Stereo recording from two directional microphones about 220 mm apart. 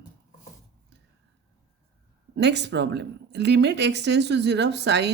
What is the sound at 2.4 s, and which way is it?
Speech, 50° right (ahead or behind).